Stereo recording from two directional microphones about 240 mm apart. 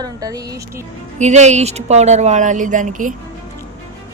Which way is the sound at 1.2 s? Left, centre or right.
Right.